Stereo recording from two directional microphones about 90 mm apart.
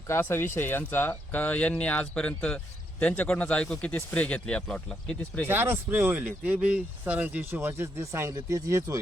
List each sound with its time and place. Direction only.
0.1 s speech: 25° left (ahead or behind)
5.5 s speech: 25° right (ahead or behind)